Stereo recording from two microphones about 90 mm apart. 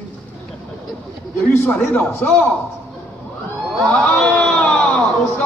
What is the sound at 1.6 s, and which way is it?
Speech, 10° left (ahead or behind).